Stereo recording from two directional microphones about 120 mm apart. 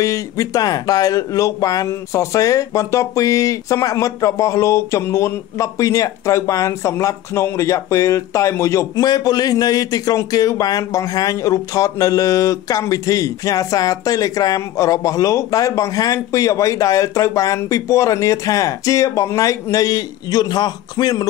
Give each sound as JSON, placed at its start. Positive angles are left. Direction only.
{"t": 0.0, "sound": "speech", "side_deg": 30}